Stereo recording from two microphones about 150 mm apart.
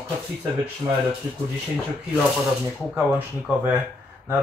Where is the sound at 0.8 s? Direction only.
20° right (ahead or behind).